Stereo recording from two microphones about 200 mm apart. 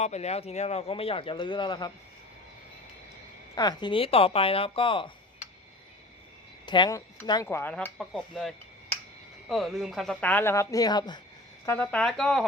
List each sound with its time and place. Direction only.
0.0 s speech: 35° left (ahead or behind)
3.5 s speech: 20° left (ahead or behind)
6.7 s speech: 20° left (ahead or behind)
7.4 s speech: 10° left (ahead or behind)
11.6 s speech: 10° left (ahead or behind)